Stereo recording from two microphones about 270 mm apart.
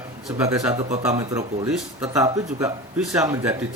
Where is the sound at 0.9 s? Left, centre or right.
Right.